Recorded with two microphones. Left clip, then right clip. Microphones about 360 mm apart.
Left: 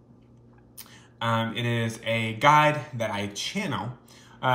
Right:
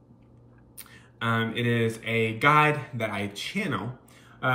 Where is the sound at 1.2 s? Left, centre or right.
Centre.